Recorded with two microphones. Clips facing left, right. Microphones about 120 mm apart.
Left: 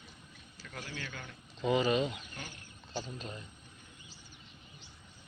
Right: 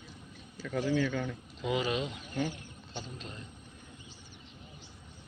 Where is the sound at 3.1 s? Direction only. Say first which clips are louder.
Left 2 dB; 5° left (ahead or behind).